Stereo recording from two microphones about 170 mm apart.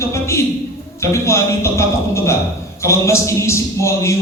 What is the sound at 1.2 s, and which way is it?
Speech, 15° left (ahead or behind).